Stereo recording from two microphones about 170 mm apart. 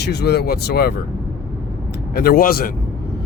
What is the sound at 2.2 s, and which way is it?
Speech, 60° left (ahead or behind).